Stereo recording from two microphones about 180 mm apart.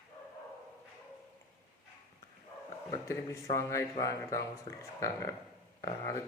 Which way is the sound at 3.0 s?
15° left (ahead or behind).